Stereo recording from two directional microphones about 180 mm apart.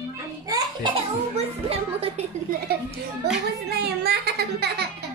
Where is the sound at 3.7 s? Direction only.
65° right (ahead or behind).